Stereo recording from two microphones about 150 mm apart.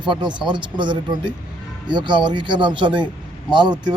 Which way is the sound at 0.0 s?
30° right (ahead or behind).